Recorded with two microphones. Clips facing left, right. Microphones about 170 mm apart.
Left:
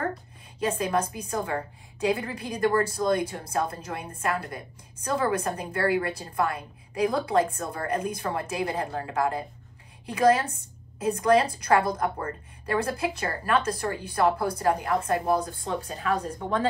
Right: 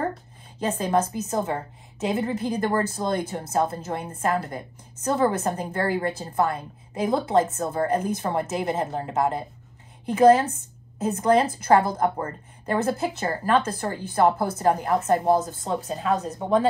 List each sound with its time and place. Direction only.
0.7 s a woman's voice: 30° right (ahead or behind)